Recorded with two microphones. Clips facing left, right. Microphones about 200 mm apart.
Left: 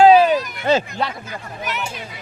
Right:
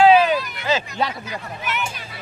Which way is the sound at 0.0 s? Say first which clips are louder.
Left 3 dB; 40° left (ahead or behind).